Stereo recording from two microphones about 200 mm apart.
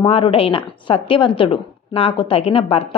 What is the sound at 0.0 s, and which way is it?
A woman's voice, 25° left (ahead or behind).